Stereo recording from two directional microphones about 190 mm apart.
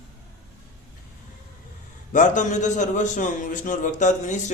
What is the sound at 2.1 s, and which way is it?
A man's voice, 40° left (ahead or behind).